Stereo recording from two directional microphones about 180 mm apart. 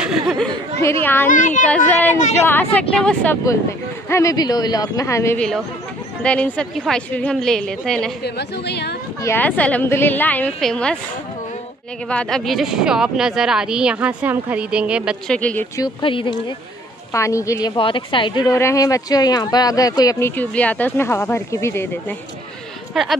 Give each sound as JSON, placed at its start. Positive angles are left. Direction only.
{"t": 0.0, "sound": "a sound", "side_deg": 0}
{"t": 0.7, "sound": "speech", "side_deg": 15}
{"t": 1.3, "sound": "speech", "side_deg": 45}
{"t": 1.7, "sound": "speech", "side_deg": 5}
{"t": 8.2, "sound": "a woman's voice", "side_deg": 65}
{"t": 9.2, "sound": "speech", "side_deg": 10}
{"t": 12.1, "sound": "speech", "side_deg": 5}
{"t": 15.3, "sound": "speech", "side_deg": 5}
{"t": 15.8, "sound": "speech", "side_deg": 30}
{"t": 17.1, "sound": "speech", "side_deg": 15}
{"t": 23.0, "sound": "speech", "side_deg": 0}